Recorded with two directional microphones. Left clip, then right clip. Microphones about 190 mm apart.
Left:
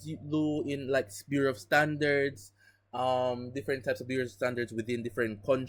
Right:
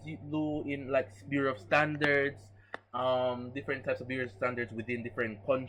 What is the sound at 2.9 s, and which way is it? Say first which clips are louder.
Speech: left 1 dB; 45° left (ahead or behind).